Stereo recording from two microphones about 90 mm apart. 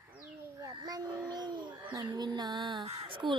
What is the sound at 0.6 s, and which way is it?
Child singing, 40° right (ahead or behind).